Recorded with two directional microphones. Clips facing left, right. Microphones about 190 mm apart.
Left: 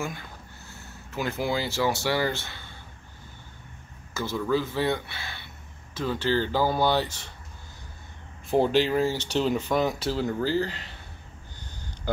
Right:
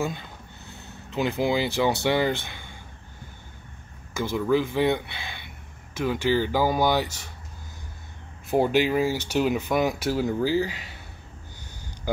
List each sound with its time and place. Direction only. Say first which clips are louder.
0.0 s speech: right 4 dB; 20° right (ahead or behind)
4.1 s speech: right 3 dB; 15° right (ahead or behind)
8.5 s speech: right 1 dB; 10° right (ahead or behind)